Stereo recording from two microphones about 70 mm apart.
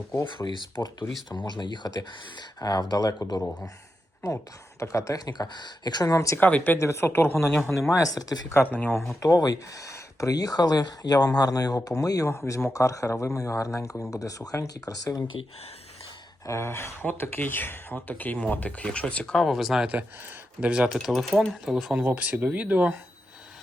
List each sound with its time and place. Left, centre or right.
0.3 s speech: left
4.8 s speech: left
5.2 s speech: left
6.3 s speech: left
6.7 s speech: left
7.9 s speech: left
12.3 s speech: left
16.5 s speech: left; by 19.5 s centre
19.5 s speech: centre
20.6 s speech: centre
20.9 s speech: centre
22.0 s speech: right